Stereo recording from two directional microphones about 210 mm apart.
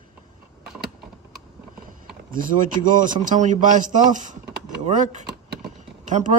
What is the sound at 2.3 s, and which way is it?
A man's voice, 40° right (ahead or behind).